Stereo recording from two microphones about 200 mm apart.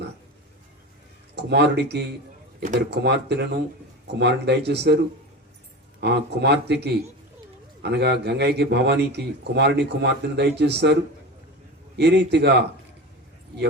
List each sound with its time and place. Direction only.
1.4 s speech: 55° right (ahead or behind)
6.0 s speech: 55° right (ahead or behind)
11.9 s speech: 60° right (ahead or behind)